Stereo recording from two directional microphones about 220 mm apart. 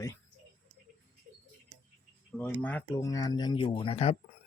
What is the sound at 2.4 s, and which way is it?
Speech, 5° left (ahead or behind).